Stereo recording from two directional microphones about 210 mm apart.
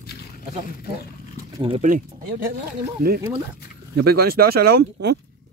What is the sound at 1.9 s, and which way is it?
Speech, 40° right (ahead or behind).